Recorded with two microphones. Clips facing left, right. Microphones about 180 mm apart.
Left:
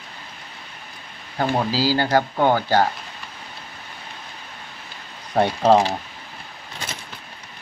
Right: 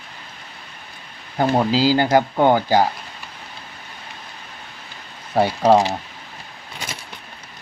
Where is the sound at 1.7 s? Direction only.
20° right (ahead or behind).